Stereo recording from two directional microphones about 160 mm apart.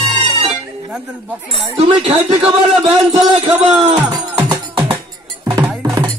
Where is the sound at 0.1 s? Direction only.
35° right (ahead or behind).